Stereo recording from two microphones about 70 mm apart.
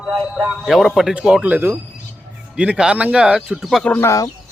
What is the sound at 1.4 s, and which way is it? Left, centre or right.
A man's voice, right.